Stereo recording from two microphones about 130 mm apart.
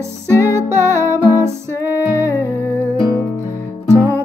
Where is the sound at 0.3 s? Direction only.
20° right (ahead or behind).